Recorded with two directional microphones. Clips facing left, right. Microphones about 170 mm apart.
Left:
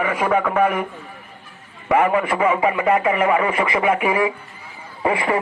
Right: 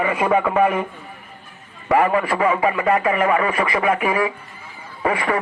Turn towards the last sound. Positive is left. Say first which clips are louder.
# left 1 dB
turn(degrees=25)  # may be behind; listen again after turning